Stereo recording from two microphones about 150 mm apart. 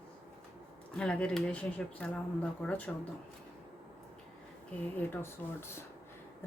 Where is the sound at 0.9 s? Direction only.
5° left (ahead or behind).